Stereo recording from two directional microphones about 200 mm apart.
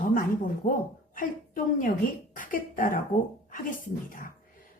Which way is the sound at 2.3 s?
45° left (ahead or behind).